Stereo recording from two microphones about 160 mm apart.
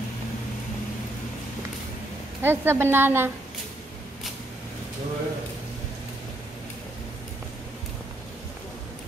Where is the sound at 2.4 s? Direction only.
15° right (ahead or behind).